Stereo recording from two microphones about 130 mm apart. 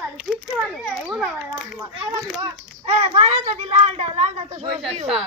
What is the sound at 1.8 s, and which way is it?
Speech, 25° right (ahead or behind).